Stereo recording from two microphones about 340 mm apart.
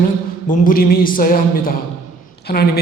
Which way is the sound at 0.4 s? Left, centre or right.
Left.